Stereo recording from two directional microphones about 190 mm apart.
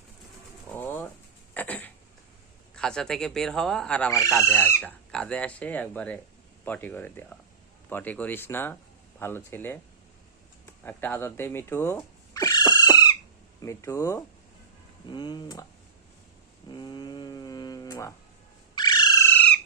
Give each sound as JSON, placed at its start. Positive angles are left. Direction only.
{"t": 0.7, "sound": "ratchet", "side_deg": 10}
{"t": 1.5, "sound": "a sound", "side_deg": 10}
{"t": 2.7, "sound": "speech", "side_deg": 5}
{"t": 10.8, "sound": "speech", "side_deg": 10}
{"t": 12.3, "sound": "owl", "side_deg": 20}
{"t": 13.6, "sound": "speech", "side_deg": 15}
{"t": 16.6, "sound": "a sound", "side_deg": 25}
{"t": 18.7, "sound": "bird", "side_deg": 20}